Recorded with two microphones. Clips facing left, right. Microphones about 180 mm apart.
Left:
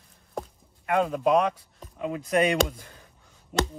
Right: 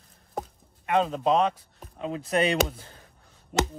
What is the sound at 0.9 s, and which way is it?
Speech, 25° right (ahead or behind).